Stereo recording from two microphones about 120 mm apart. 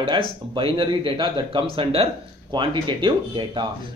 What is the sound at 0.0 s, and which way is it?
Speech, 45° right (ahead or behind).